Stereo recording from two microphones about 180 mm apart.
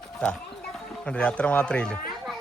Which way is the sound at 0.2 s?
5° left (ahead or behind).